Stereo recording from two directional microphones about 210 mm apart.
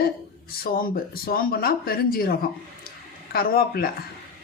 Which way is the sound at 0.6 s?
45° left (ahead or behind).